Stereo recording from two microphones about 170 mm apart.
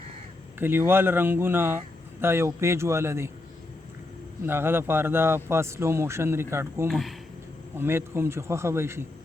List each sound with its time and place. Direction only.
0.6 s speech: 15° right (ahead or behind)
4.4 s speech: 15° right (ahead or behind)